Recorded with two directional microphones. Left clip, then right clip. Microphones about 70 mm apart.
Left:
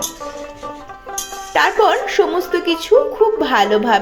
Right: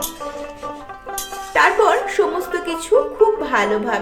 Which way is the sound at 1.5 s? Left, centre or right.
Left.